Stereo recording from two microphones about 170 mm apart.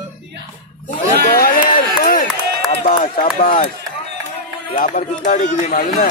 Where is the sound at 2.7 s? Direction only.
50° left (ahead or behind).